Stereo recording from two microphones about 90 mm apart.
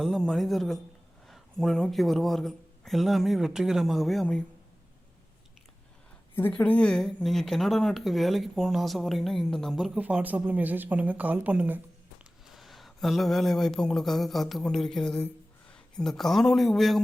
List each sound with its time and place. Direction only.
0.0 s speech: centre (ahead or behind)
6.5 s speech: 15° left (ahead or behind)
9.9 s speech: 15° right (ahead or behind)
12.5 s speech: centre (ahead or behind)